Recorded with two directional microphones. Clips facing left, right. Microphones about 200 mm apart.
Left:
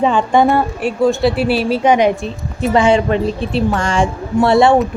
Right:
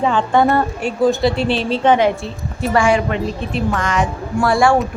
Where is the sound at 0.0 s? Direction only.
15° left (ahead or behind).